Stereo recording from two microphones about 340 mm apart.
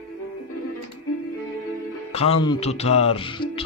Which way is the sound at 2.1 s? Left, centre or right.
Centre.